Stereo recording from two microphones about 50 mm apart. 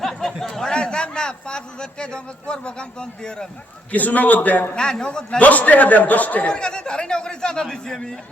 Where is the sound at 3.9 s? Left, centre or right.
Left.